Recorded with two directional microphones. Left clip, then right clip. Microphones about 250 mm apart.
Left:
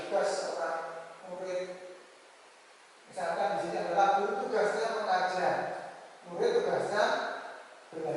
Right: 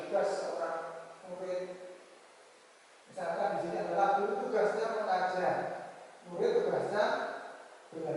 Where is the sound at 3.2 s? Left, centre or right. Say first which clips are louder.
Left 2 dB; centre.